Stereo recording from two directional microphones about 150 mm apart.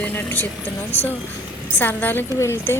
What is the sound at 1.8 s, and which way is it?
Speech, 10° left (ahead or behind).